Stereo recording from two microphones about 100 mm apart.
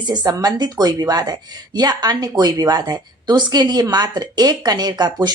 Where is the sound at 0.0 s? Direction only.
45° right (ahead or behind).